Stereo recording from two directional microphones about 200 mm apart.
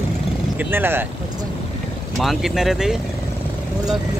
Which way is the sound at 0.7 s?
10° right (ahead or behind).